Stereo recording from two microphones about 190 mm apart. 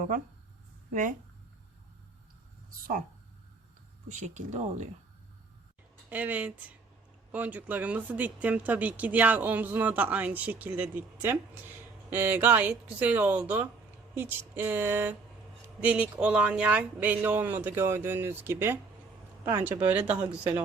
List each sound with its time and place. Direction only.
4.1 s speech: 40° right (ahead or behind)
6.1 s speech: 10° right (ahead or behind)